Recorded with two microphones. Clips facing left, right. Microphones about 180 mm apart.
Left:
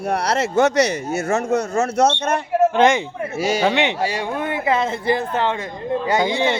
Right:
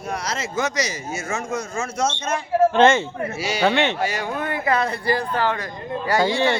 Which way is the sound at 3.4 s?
50° left (ahead or behind).